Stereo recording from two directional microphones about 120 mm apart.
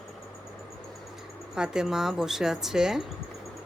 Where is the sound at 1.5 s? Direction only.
5° right (ahead or behind).